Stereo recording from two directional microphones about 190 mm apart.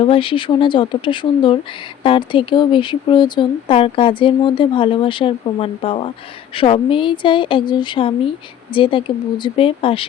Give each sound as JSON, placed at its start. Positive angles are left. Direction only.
{"t": 0.0, "sound": "speech", "side_deg": 30}